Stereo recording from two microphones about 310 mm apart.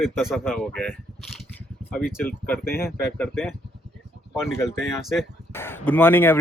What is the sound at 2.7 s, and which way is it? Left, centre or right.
Speech, left.